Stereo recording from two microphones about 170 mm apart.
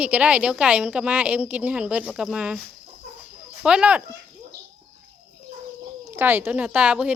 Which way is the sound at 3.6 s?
5° right (ahead or behind).